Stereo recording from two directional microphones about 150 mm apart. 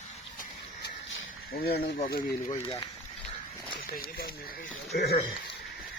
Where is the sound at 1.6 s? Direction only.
90° left.